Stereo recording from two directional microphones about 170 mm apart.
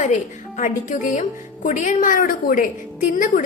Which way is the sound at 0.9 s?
45° left (ahead or behind).